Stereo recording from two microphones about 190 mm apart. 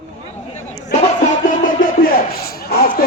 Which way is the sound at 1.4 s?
45° left (ahead or behind).